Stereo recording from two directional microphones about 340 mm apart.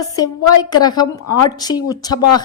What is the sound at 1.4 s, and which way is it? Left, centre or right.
Speech, centre.